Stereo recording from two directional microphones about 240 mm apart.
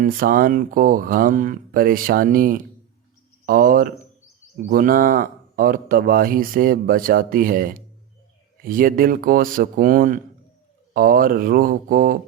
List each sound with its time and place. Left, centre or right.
0.0 s speech: right